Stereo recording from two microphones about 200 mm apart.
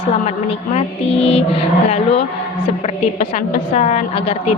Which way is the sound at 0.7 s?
30° left (ahead or behind).